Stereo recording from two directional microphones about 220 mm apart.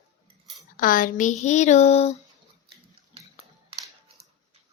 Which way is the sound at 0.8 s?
40° left (ahead or behind).